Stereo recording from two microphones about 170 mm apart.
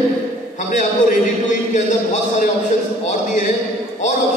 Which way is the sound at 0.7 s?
50° left (ahead or behind).